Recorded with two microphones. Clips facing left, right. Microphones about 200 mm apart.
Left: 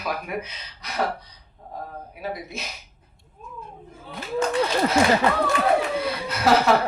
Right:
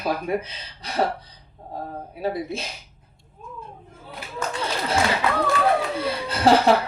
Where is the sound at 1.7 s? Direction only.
30° right (ahead or behind).